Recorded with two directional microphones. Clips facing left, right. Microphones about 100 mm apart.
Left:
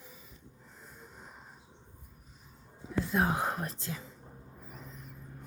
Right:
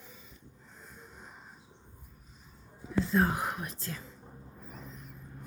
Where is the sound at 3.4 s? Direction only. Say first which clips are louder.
Left 2 dB; 30° left (ahead or behind).